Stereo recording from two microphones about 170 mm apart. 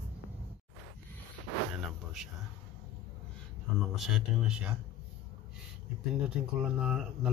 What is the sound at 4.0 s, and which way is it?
Speech, centre (ahead or behind).